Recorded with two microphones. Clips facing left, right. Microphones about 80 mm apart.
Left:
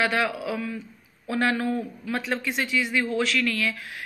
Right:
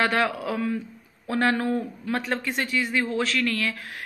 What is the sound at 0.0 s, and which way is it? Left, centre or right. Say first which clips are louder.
A woman's voice: right 1 dB; right.